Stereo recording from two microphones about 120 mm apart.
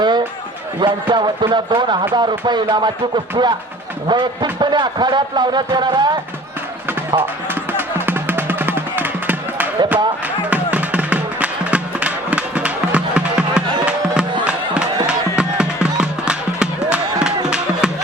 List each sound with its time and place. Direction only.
0.8 s speech: 45° right (ahead or behind)
7.2 s music: 15° right (ahead or behind)